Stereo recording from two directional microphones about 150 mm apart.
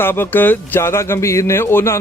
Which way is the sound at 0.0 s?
15° left (ahead or behind).